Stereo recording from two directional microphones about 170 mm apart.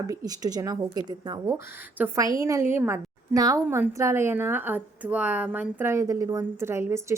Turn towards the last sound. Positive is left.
turn(degrees=-15)  # may be behind; listen again after turning